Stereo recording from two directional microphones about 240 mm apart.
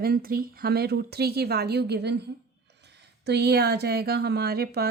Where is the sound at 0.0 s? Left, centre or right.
Right.